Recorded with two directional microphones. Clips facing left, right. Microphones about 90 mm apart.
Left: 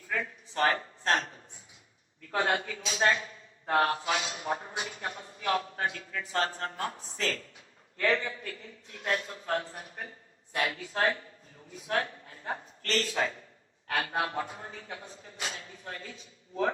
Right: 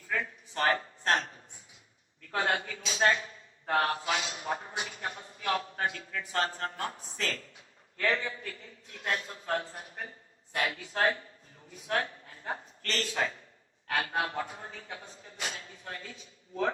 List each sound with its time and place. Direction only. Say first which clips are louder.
0.1 s a sound: even; 30° left (ahead or behind)
1.0 s a man's voice: left 1 dB; 30° left (ahead or behind)
11.9 s a man's voice: left 1 dB; 35° left (ahead or behind)